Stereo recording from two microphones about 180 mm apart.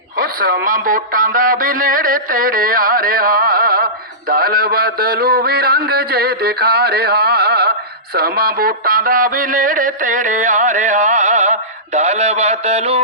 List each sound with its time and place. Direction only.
0.2 s a man's voice: 55° right (ahead or behind); by 11.5 s 40° right (ahead or behind)
11.9 s mantra: 40° right (ahead or behind)